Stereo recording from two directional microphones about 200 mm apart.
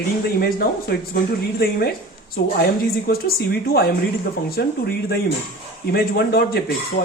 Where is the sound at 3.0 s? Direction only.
50° left (ahead or behind).